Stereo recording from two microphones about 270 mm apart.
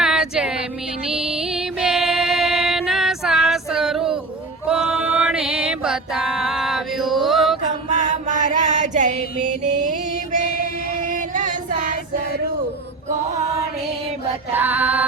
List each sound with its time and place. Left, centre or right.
0.0 s a sound: centre
1.0 s music: centre
8.1 s mantra: right
11.0 s female singing: right
13.1 s chant: right
14.5 s mantra: centre